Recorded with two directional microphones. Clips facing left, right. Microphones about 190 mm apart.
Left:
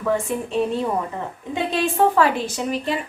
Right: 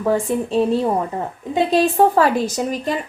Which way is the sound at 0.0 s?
35° right (ahead or behind).